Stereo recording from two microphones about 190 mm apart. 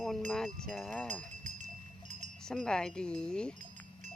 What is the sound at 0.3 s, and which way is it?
Speech, 5° left (ahead or behind).